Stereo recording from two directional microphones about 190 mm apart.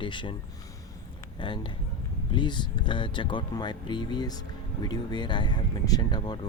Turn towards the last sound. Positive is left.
turn(degrees=25)  # may be behind; listen again after turning